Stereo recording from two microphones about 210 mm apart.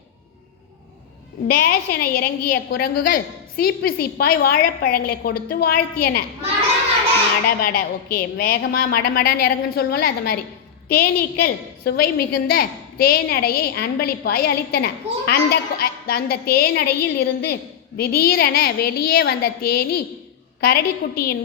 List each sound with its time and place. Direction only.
1.5 s a woman's voice: 40° left (ahead or behind)
7.4 s a woman's voice: 45° left (ahead or behind)